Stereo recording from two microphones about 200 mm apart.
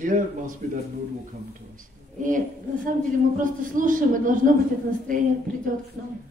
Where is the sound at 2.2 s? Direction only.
40° right (ahead or behind).